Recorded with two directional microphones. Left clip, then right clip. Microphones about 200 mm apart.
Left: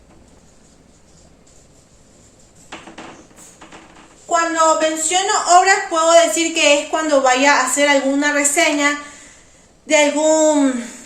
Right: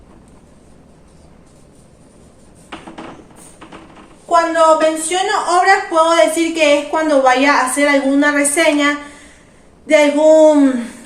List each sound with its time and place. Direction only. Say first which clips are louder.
4.3 s a woman's voice: right 4 dB; 10° left (ahead or behind)